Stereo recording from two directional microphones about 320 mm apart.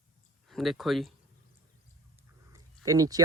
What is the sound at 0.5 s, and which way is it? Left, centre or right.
Speech, centre.